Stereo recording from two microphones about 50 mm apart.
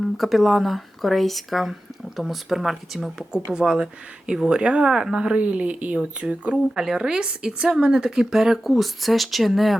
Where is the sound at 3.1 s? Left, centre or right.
Centre.